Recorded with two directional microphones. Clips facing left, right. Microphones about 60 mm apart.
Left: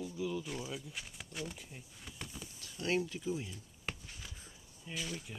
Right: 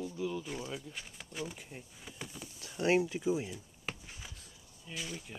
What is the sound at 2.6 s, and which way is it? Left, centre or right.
Speech, right.